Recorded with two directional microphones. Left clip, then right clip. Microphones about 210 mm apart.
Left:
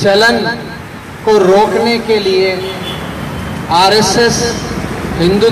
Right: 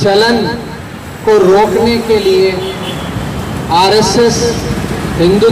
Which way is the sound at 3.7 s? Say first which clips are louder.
Even; 35° left (ahead or behind).